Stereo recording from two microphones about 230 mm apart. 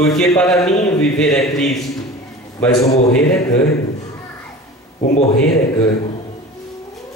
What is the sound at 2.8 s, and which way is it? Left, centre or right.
Speech, left.